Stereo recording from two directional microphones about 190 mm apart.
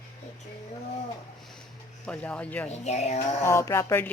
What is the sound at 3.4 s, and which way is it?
Speech, 15° left (ahead or behind).